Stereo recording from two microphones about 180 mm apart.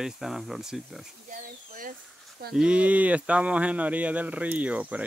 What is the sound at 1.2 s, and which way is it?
Speech, 50° right (ahead or behind).